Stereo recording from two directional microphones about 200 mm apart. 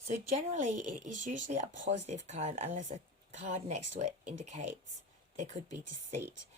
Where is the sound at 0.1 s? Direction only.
35° right (ahead or behind).